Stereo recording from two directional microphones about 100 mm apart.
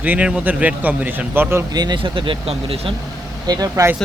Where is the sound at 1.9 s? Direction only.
55° right (ahead or behind).